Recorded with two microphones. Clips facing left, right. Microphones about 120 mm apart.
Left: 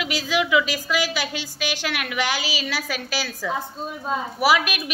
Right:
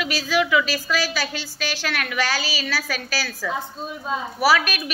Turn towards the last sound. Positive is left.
turn(degrees=20)  # may be behind; listen again after turning